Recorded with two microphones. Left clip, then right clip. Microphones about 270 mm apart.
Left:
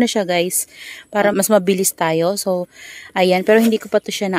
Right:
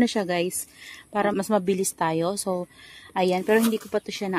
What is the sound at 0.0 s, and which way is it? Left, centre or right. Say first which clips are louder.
A woman's voice: left 7 dB; left.